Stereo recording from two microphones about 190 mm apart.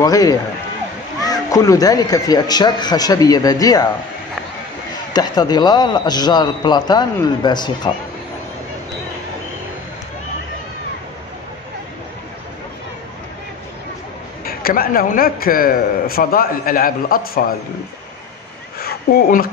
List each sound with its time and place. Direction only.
0.0 s a man's voice: 20° left (ahead or behind)
5.1 s a man's voice: 20° left (ahead or behind)
14.4 s a man's voice: 50° left (ahead or behind)
18.8 s a sound: 55° left (ahead or behind)